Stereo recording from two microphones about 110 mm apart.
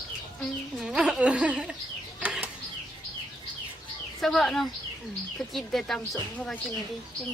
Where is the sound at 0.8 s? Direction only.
5° right (ahead or behind).